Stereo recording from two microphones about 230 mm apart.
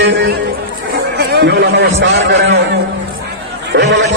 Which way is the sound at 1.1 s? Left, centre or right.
Right.